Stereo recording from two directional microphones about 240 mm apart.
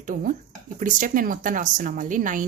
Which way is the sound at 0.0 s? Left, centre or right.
Right.